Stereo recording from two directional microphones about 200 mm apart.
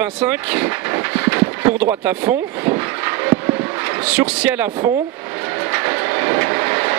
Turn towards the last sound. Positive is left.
turn(degrees=-15)  # may be behind; listen again after turning